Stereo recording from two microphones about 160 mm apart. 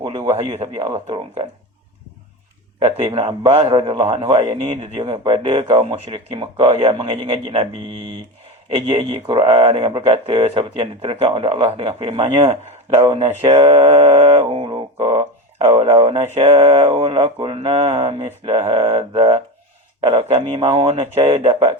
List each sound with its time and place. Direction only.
0.9 s speech: 40° right (ahead or behind)
2.8 s speech: 35° right (ahead or behind)
8.7 s speech: 35° right (ahead or behind)
14.9 s a sound: 25° right (ahead or behind)
15.5 s speech: 35° right (ahead or behind)